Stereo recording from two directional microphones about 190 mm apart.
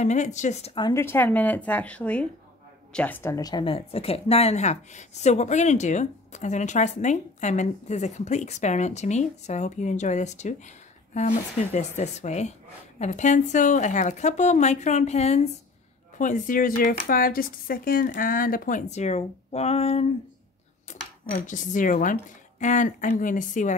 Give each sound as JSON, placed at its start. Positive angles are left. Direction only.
{"t": 0.0, "sound": "a woman's voice", "side_deg": 40}
{"t": 0.8, "sound": "a woman's voice", "side_deg": 15}
{"t": 21.5, "sound": "a woman's voice", "side_deg": 45}